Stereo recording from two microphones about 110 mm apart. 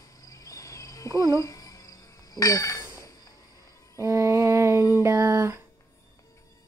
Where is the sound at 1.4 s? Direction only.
30° left (ahead or behind).